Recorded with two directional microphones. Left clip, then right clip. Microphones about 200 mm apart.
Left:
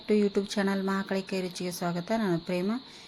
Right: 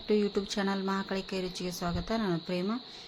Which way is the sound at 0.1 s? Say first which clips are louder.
Left 3 dB; 15° left (ahead or behind).